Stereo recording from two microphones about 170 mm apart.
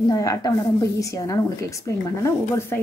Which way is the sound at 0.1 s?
20° left (ahead or behind).